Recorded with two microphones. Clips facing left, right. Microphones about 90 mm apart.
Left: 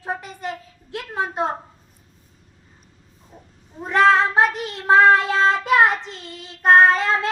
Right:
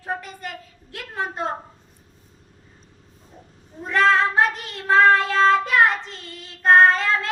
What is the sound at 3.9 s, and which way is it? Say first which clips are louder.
Child singing: left 2 dB; 20° left (ahead or behind).